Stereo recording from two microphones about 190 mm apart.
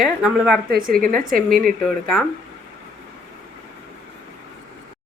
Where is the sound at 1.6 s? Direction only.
5° left (ahead or behind).